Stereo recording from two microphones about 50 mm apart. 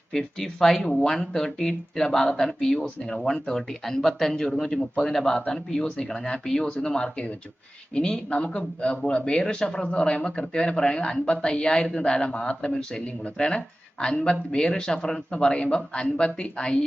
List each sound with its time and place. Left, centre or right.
0.1 s speech: centre